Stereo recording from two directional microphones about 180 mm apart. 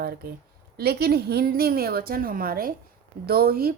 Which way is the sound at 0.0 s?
60° right (ahead or behind).